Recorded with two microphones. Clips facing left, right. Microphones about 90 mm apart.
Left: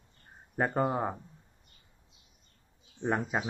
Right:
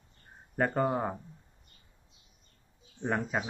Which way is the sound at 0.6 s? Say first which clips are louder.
Even; 10° left (ahead or behind).